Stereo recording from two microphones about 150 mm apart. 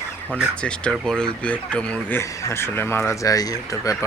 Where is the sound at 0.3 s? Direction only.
10° right (ahead or behind).